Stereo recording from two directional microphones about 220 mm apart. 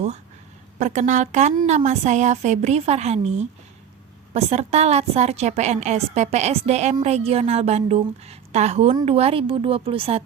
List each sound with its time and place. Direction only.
0.8 s a woman's voice: 30° right (ahead or behind)